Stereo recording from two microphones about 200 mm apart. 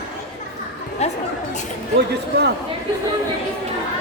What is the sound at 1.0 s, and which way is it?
Speech, 35° left (ahead or behind).